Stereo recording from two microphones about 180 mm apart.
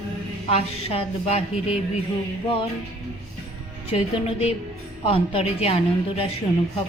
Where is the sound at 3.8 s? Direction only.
35° left (ahead or behind).